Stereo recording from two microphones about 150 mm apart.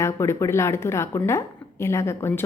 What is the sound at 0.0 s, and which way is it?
A woman's voice, 20° left (ahead or behind).